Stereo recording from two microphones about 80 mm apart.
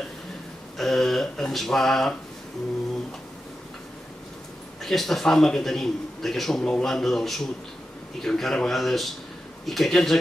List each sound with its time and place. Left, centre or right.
0.7 s a man's voice: centre
4.8 s a man's voice: centre